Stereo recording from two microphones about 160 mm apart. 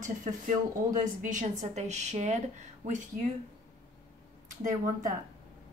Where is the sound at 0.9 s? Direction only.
55° right (ahead or behind).